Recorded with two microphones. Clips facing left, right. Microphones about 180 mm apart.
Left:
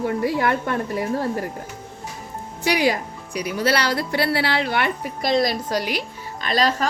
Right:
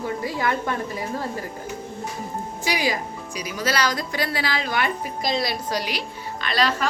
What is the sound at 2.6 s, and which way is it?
Speech, 60° left (ahead or behind).